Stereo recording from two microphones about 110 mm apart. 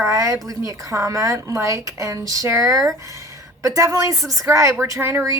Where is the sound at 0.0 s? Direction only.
30° right (ahead or behind).